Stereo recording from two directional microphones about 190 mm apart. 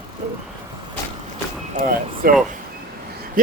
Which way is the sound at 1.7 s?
50° right (ahead or behind).